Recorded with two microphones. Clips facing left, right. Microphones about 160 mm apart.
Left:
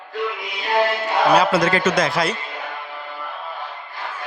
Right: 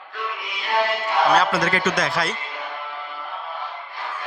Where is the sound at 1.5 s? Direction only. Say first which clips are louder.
Left 4 dB; 30° left (ahead or behind).